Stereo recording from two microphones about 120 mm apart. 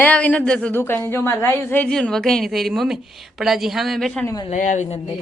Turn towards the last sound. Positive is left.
turn(degrees=70)  # may be behind; listen again after turning